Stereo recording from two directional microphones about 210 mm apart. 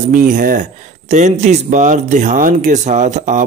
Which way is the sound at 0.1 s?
40° right (ahead or behind).